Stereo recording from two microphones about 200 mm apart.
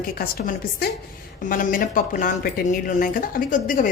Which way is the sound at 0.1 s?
45° left (ahead or behind).